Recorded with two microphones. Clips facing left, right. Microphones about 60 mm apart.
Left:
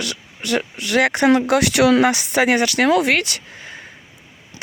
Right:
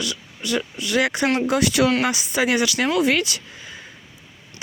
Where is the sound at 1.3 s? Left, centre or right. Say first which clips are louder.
Left 3 dB; left.